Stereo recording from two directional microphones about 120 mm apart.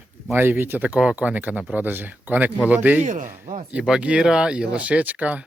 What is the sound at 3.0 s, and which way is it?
Speech, 90° right.